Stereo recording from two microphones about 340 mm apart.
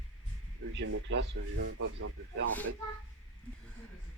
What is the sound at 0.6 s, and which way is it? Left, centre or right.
Speech, right.